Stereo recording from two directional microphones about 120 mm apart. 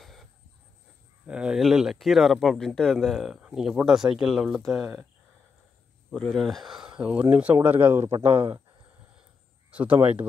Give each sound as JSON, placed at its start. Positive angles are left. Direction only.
{"t": 0.0, "sound": "a sound", "side_deg": 0}
{"t": 1.2, "sound": "speech", "side_deg": -10}
{"t": 6.1, "sound": "speech", "side_deg": 5}
{"t": 8.1, "sound": "speech", "side_deg": -45}
{"t": 9.7, "sound": "speech", "side_deg": -10}